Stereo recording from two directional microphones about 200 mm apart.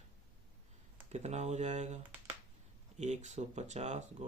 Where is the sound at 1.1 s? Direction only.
35° right (ahead or behind).